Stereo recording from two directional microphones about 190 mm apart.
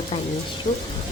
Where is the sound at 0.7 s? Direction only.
40° left (ahead or behind).